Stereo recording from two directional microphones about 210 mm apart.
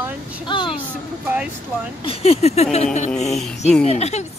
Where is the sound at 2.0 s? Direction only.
30° left (ahead or behind).